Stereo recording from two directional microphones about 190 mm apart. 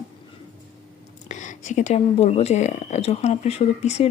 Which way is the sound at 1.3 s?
40° left (ahead or behind).